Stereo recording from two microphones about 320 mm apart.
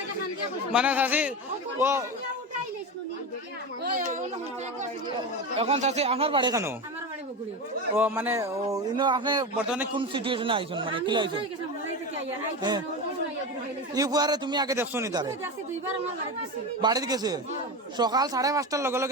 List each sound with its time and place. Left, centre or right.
0.7 s a man's voice: centre
3.9 s speech: right
5.5 s a man's voice: centre
7.9 s a man's voice: centre
13.9 s a man's voice: centre
16.8 s a man's voice: centre